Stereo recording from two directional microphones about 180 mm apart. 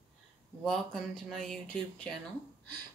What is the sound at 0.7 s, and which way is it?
Speech, 5° left (ahead or behind).